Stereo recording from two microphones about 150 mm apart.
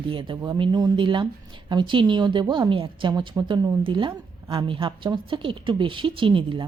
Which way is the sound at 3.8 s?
35° right (ahead or behind).